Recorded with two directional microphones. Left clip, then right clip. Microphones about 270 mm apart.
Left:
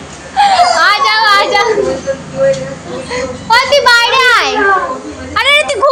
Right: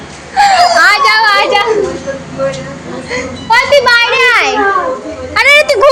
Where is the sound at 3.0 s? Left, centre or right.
Centre.